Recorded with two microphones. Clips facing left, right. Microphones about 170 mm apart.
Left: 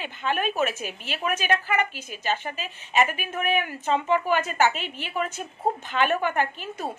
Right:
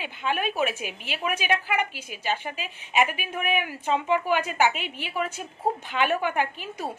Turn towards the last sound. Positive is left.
turn(degrees=-10)  # may be behind; listen again after turning